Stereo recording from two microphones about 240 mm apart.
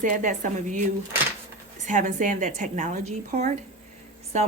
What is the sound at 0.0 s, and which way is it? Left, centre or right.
Speech, right.